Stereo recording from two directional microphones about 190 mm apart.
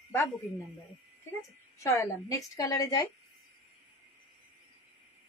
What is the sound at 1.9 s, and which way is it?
A woman's voice, 20° left (ahead or behind).